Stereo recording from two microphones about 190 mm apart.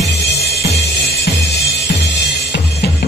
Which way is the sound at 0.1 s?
60° left (ahead or behind).